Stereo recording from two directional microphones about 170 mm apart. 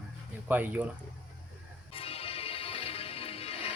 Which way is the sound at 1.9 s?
35° left (ahead or behind).